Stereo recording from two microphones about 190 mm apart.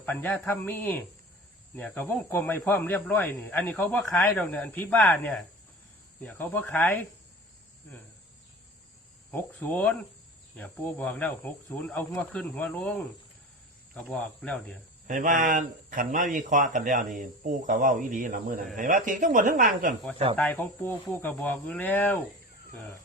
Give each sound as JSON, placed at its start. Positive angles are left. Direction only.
{"t": 0.0, "sound": "cricket", "side_deg": 10}
{"t": 9.3, "sound": "cricket", "side_deg": 10}
{"t": 13.9, "sound": "speech", "side_deg": 5}
{"t": 15.0, "sound": "speech", "side_deg": -45}
{"t": 20.3, "sound": "cricket", "side_deg": 10}